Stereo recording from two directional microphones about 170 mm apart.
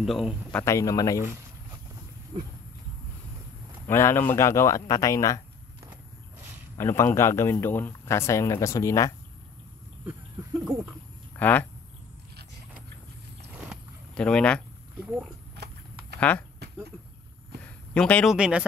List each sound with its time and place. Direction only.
0.0 s speech: centre (ahead or behind)
0.6 s speech: 15° left (ahead or behind)
3.8 s speech: 15° left (ahead or behind)
6.8 s speech: 15° left (ahead or behind)
11.3 s speech: 10° left (ahead or behind)
14.1 s speech: 5° left (ahead or behind)
15.0 s speech: 5° right (ahead or behind)
15.5 s horse: 75° right (ahead or behind)
16.2 s speech: 10° left (ahead or behind)
17.9 s speech: 5° left (ahead or behind)
18.3 s speech: 5° right (ahead or behind)